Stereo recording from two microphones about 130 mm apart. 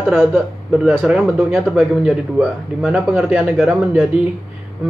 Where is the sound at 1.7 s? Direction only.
Centre (ahead or behind).